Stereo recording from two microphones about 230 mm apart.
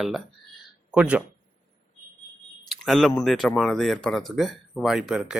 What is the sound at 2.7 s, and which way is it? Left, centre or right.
Speech, centre.